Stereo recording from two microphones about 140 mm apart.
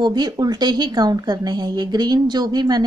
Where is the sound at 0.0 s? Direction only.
30° right (ahead or behind).